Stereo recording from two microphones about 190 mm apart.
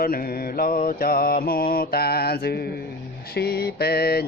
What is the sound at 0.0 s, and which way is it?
Mantra, 50° left (ahead or behind).